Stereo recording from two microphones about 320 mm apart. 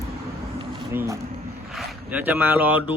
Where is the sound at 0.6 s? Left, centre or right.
Centre.